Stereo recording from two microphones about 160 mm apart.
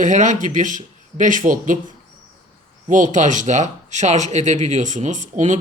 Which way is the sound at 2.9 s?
50° right (ahead or behind).